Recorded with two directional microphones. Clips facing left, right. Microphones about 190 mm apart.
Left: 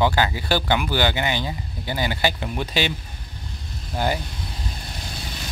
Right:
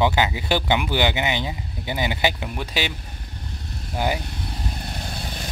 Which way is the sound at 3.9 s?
10° right (ahead or behind).